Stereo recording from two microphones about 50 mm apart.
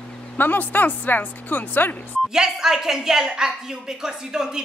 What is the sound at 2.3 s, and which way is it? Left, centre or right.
A woman's voice, centre.